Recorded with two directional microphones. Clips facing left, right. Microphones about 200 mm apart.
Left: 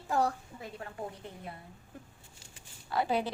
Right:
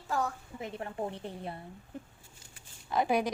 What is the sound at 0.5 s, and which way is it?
A woman's voice, 25° right (ahead or behind).